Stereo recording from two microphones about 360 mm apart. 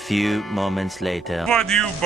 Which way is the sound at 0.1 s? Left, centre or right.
Centre.